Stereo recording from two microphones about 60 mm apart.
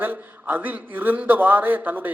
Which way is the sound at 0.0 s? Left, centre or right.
Right.